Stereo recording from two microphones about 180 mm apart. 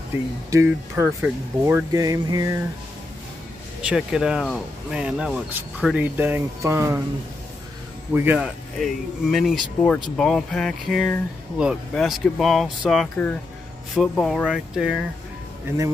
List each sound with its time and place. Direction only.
0.5 s speech: 15° right (ahead or behind)
3.8 s speech: 5° right (ahead or behind)
8.1 s speech: 10° right (ahead or behind)
8.4 s speech: centre (ahead or behind)